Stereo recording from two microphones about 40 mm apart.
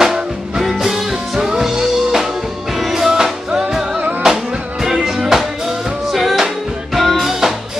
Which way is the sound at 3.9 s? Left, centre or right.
Right.